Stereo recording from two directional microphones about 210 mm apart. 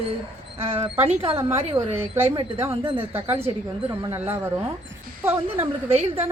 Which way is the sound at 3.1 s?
10° right (ahead or behind).